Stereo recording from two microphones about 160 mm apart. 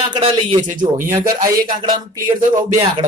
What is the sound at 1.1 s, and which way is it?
Speech, 25° right (ahead or behind).